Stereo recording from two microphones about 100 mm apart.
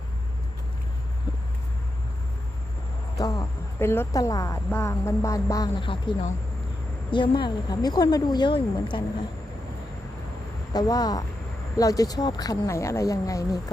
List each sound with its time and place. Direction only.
3.2 s speech: 35° left (ahead or behind)
3.8 s a woman's voice: 25° left (ahead or behind)
4.1 s speech: 35° left (ahead or behind)
5.7 s speech: 55° left (ahead or behind)
7.1 s a woman's voice: 50° left (ahead or behind)
10.7 s speech: 40° left (ahead or behind)